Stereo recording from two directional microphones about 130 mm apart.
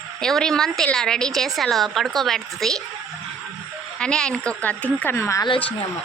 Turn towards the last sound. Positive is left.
turn(degrees=20)  # may be behind; listen again after turning